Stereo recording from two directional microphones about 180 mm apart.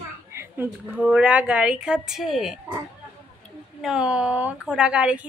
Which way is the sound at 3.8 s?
5° right (ahead or behind).